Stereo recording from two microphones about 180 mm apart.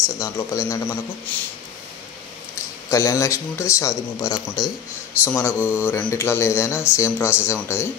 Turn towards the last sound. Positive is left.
turn(degrees=15)  # may be behind; listen again after turning